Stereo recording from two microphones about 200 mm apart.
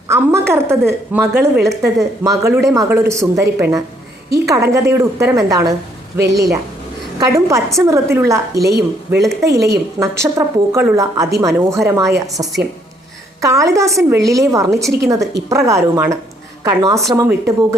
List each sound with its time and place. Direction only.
0.1 s a woman's voice: 15° right (ahead or behind)
8.5 s a woman's voice: 55° right (ahead or behind)
9.6 s a woman's voice: 15° right (ahead or behind)